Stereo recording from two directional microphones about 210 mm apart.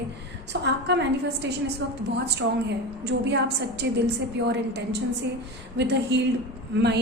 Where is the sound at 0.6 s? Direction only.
55° right (ahead or behind).